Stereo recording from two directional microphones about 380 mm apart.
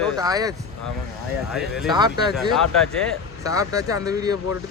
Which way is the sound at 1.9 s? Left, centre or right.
Centre.